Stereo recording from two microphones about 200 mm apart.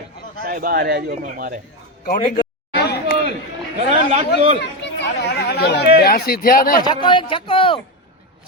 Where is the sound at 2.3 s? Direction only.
55° left (ahead or behind).